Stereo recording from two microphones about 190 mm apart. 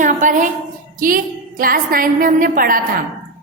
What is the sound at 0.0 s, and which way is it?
A woman's voice, 45° right (ahead or behind).